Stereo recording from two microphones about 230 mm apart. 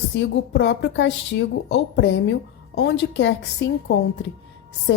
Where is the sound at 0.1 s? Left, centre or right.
Left.